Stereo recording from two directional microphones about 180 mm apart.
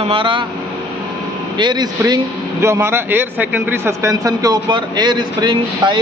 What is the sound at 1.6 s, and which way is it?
A man's voice, 25° right (ahead or behind).